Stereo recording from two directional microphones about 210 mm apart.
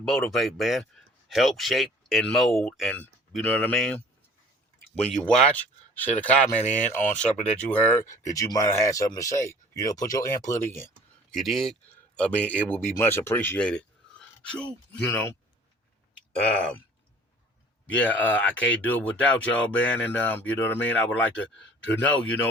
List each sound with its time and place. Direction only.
0.0 s speech: 5° left (ahead or behind)
11.3 s speech: centre (ahead or behind)
18.0 s speech: 5° left (ahead or behind)